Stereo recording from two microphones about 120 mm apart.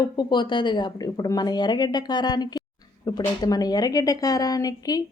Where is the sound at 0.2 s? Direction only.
40° left (ahead or behind).